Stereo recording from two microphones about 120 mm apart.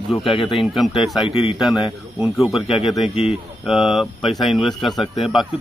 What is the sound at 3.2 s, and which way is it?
Speech, 5° right (ahead or behind).